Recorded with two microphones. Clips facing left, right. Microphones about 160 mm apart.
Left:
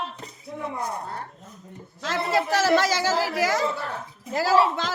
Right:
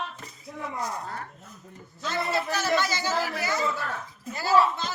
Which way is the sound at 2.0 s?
90° left.